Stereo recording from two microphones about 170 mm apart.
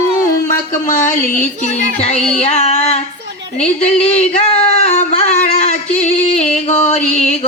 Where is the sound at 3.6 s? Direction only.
40° left (ahead or behind).